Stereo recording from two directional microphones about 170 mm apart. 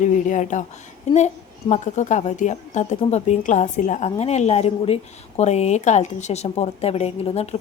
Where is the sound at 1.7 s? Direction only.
45° left (ahead or behind).